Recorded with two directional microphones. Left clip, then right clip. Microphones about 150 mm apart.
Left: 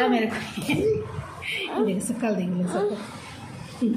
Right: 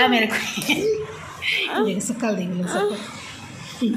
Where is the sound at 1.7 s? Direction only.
25° right (ahead or behind).